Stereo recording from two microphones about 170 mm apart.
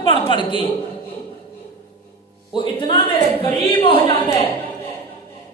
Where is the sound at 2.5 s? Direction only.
30° left (ahead or behind).